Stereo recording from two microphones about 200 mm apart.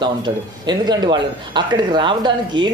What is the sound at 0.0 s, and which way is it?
A man's voice, 20° right (ahead or behind).